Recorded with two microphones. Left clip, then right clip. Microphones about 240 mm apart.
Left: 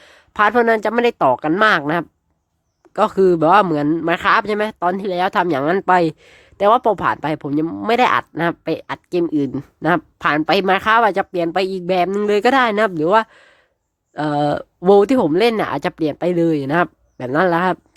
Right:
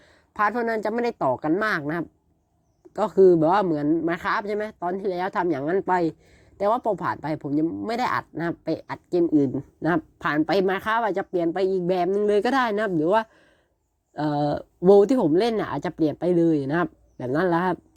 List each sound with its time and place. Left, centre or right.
0.0 s speech: centre
2.9 s speech: centre